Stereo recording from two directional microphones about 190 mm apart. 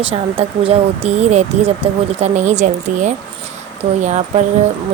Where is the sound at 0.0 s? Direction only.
30° right (ahead or behind).